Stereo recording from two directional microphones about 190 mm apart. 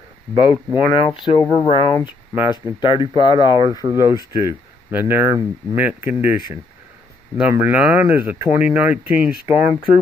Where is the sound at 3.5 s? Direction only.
20° right (ahead or behind).